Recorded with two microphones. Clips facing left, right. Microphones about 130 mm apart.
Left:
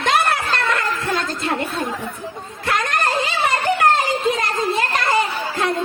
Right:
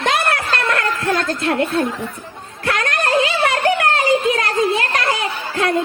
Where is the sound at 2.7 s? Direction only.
65° right (ahead or behind).